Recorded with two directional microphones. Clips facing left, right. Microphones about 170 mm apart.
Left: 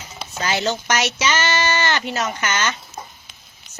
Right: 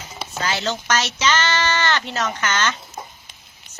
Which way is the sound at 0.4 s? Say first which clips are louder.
Left 2 dB; 15° left (ahead or behind).